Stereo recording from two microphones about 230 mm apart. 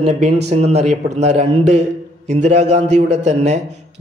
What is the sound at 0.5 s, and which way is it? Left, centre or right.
A man's voice, right.